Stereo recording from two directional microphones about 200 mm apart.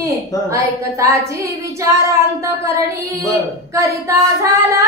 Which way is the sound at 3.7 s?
15° right (ahead or behind).